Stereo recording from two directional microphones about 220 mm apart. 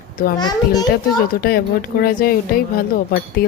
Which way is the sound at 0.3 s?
20° left (ahead or behind).